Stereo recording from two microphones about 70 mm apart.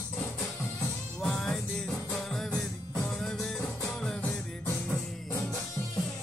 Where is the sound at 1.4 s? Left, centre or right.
Centre.